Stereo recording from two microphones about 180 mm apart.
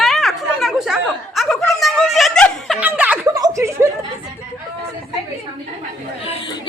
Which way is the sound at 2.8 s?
10° right (ahead or behind).